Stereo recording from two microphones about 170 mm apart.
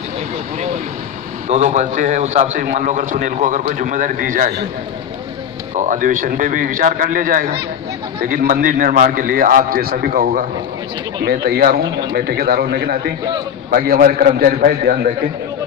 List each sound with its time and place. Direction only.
1.5 s a man's voice: 45° right (ahead or behind)
5.8 s a man's voice: 50° right (ahead or behind); by 12.9 s 70° right (ahead or behind)
13.7 s a man's voice: 60° right (ahead or behind)